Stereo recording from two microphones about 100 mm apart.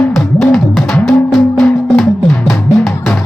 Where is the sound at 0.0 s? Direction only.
5° left (ahead or behind).